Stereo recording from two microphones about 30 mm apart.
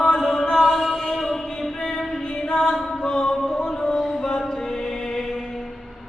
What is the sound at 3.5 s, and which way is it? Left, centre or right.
Music, left.